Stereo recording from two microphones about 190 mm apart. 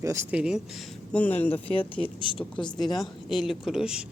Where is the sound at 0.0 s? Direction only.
15° right (ahead or behind).